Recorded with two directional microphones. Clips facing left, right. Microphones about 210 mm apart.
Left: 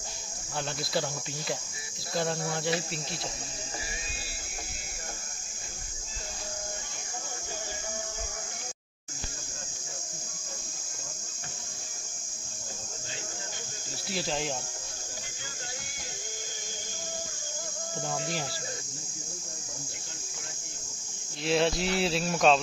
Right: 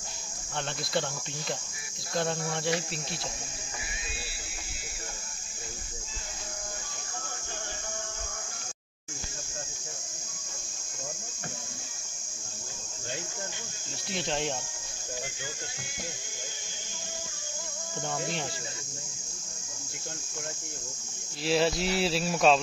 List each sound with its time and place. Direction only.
2.1 s speech: centre (ahead or behind)
14.1 s speech: centre (ahead or behind)
21.5 s speech: centre (ahead or behind)